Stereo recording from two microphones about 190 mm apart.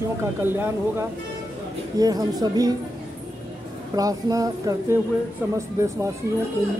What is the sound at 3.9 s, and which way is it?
Speech, 20° right (ahead or behind).